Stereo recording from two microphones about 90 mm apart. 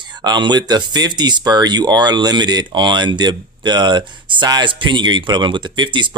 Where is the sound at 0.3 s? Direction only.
55° right (ahead or behind).